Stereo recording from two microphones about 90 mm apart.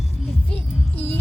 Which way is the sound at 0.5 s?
20° left (ahead or behind).